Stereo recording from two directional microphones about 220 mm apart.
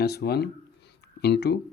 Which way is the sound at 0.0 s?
45° left (ahead or behind).